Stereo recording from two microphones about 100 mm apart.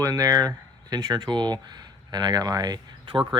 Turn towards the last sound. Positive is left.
turn(degrees=-50)  # may be behind; listen again after turning